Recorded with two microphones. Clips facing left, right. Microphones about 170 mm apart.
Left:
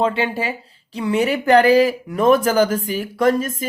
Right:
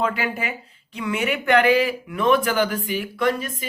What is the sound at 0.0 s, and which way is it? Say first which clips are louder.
Speech: left 5 dB; 30° left (ahead or behind).